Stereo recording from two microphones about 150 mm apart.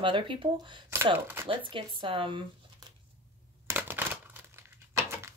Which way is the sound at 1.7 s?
35° right (ahead or behind).